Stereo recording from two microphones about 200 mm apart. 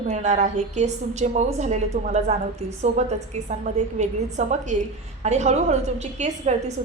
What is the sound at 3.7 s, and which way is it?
A woman's voice, 35° right (ahead or behind).